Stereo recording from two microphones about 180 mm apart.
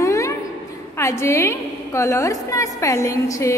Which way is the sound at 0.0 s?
15° left (ahead or behind).